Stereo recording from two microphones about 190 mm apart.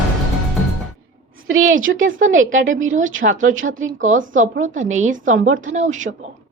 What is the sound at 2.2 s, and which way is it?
Speech, 90° right.